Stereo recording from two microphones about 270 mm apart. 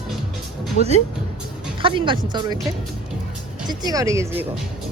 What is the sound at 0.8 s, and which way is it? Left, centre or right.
Speech, left.